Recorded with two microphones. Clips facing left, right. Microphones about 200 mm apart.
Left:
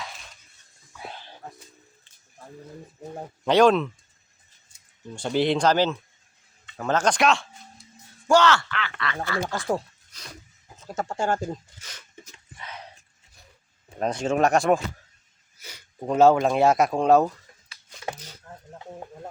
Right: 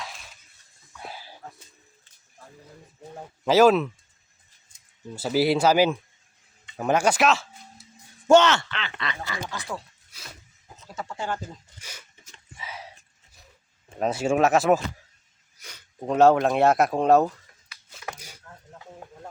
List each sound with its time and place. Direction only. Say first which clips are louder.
0.0 s crushing: even; centre (ahead or behind)
0.9 s a sound: even; 5° right (ahead or behind)
3.4 s speech: right 1 dB; 5° right (ahead or behind)
5.1 s speech: right 1 dB; 5° right (ahead or behind)
8.3 s speech: right 2 dB; 20° right (ahead or behind)
9.5 s speech: left 8 dB; 45° left (ahead or behind)
10.1 s a sound: left 1 dB; 10° right (ahead or behind)
10.9 s speech: left 6 dB; 45° left (ahead or behind)
11.8 s speech: right 1 dB; 10° right (ahead or behind)
12.5 s whispering: right 1 dB; 5° right (ahead or behind)
14.0 s speech: right 1 dB; 5° right (ahead or behind)
18.1 s a sound: left 4 dB; 30° left (ahead or behind)
18.5 s snake: left 5 dB; 30° left (ahead or behind)